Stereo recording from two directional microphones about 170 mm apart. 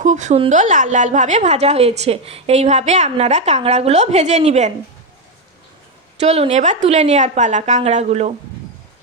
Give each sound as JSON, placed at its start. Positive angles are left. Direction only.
{"t": 0.0, "sound": "a woman's voice", "side_deg": -45}
{"t": 6.1, "sound": "a woman's voice", "side_deg": -35}